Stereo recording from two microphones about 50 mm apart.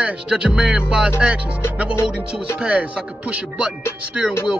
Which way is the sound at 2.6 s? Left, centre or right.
Right.